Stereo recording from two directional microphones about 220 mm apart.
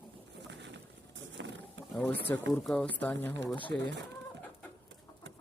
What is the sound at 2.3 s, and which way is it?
Speech, 10° left (ahead or behind).